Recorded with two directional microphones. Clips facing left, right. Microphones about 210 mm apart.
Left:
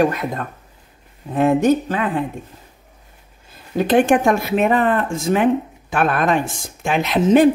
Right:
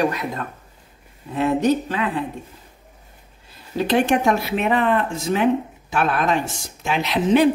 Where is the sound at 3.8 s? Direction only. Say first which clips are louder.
Left 4 dB; 50° left (ahead or behind).